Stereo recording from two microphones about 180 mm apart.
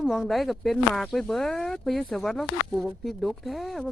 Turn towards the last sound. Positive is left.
turn(degrees=0)  # may be behind; listen again after turning